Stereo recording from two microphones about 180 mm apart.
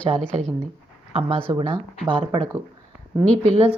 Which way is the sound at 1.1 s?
30° right (ahead or behind).